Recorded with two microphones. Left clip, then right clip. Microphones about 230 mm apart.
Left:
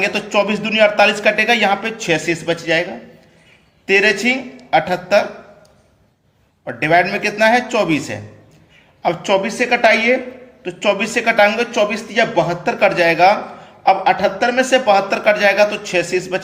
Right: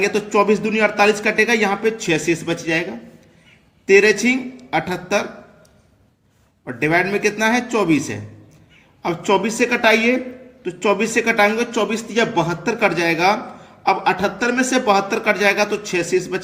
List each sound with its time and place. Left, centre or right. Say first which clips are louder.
0.0 s speech: even; centre
3.8 s speech: even; centre
6.7 s a woman's voice: left 4 dB; centre